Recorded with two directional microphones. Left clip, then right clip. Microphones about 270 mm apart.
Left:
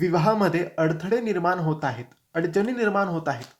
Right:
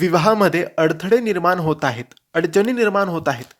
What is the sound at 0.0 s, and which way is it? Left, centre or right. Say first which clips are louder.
Speech: right 6 dB; right.